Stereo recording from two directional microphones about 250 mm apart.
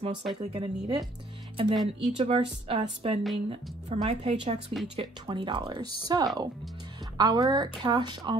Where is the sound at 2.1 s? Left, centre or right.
Right.